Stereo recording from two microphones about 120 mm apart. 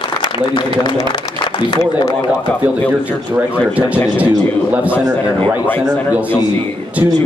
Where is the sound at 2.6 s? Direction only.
15° right (ahead or behind).